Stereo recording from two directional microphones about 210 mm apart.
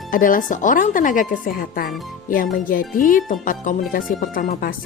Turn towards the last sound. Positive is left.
turn(degrees=45)  # may be behind; listen again after turning